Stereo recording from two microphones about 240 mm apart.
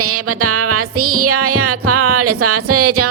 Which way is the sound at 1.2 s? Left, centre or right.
Right.